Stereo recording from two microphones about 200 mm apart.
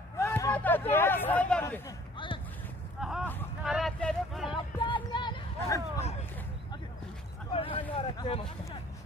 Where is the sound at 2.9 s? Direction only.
5° right (ahead or behind).